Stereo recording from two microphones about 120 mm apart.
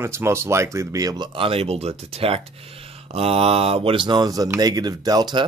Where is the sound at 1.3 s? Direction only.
50° right (ahead or behind).